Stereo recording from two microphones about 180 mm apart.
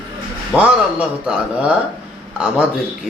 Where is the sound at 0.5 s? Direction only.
5° right (ahead or behind).